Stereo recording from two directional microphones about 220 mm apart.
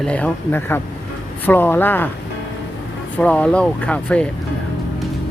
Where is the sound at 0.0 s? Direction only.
5° left (ahead or behind).